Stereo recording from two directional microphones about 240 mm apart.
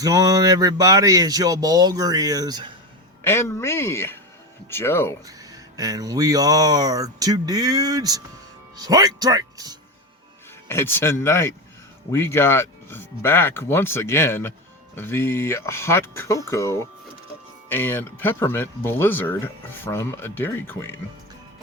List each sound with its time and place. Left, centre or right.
0.0 s speech: centre
3.2 s speech: centre
5.2 s speech: centre
10.7 s speech: centre